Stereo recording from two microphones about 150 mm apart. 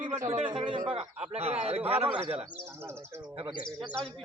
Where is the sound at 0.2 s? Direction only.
55° right (ahead or behind).